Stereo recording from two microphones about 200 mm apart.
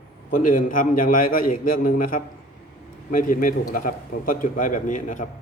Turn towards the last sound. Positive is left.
turn(degrees=40)  # may be behind; listen again after turning